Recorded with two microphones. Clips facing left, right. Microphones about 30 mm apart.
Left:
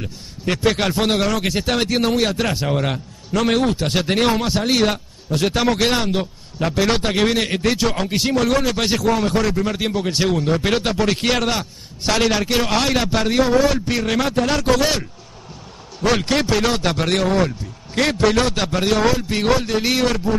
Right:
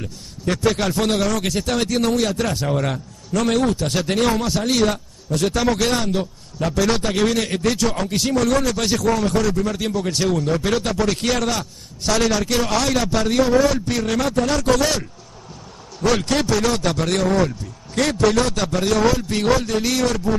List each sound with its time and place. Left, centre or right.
0.0 s a man's voice: left
7.4 s a man's voice: left
8.1 s a man's voice: centre
10.5 s a man's voice: left
13.3 s a man's voice: centre